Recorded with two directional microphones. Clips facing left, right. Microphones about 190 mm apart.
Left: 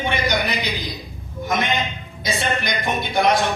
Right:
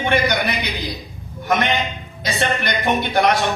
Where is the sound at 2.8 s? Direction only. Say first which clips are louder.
Right 4 dB; 60° right (ahead or behind).